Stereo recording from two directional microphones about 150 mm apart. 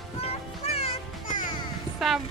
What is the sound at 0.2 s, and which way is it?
Music, 40° left (ahead or behind).